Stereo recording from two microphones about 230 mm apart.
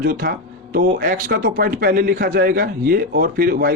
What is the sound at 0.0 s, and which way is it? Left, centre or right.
Speech, right.